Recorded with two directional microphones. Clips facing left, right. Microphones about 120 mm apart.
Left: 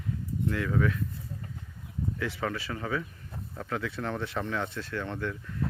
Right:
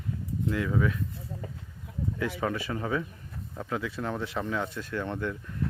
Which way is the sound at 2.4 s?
20° right (ahead or behind).